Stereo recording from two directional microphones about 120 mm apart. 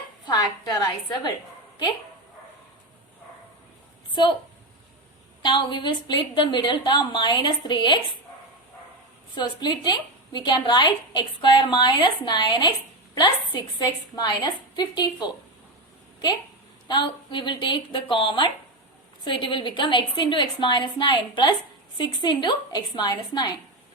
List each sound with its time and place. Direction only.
0.3 s a woman's voice: 35° left (ahead or behind)
4.1 s a woman's voice: 40° left (ahead or behind)
5.4 s a woman's voice: 40° left (ahead or behind)
9.3 s a woman's voice: 40° left (ahead or behind)
16.9 s a woman's voice: 40° left (ahead or behind)